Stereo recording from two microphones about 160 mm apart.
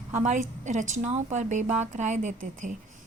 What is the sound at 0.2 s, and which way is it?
A woman's voice, 50° right (ahead or behind).